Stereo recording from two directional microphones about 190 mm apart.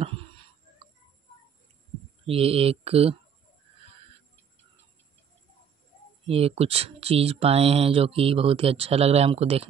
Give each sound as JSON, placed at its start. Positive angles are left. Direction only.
{"t": 2.2, "sound": "speech", "side_deg": -30}
{"t": 6.2, "sound": "speech", "side_deg": -30}